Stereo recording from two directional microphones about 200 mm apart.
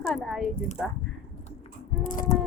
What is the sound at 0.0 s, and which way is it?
Speech, centre (ahead or behind).